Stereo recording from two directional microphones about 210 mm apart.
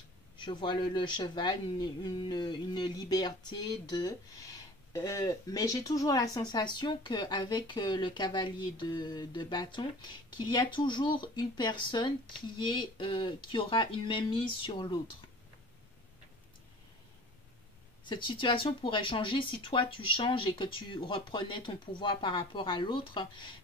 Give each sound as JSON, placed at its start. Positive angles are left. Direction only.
{"t": 0.4, "sound": "speech", "side_deg": 20}
{"t": 18.0, "sound": "speech", "side_deg": 25}